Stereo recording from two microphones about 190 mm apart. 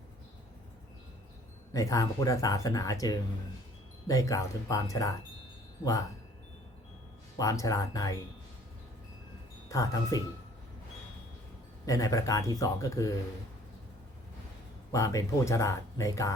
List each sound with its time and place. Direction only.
1.7 s speech: 15° left (ahead or behind)
7.3 s speech: 20° left (ahead or behind)
9.6 s speech: 15° left (ahead or behind)
11.9 s speech: 20° left (ahead or behind)
14.9 s speech: 15° left (ahead or behind)